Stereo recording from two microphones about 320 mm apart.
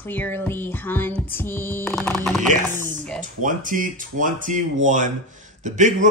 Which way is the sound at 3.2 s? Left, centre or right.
Right.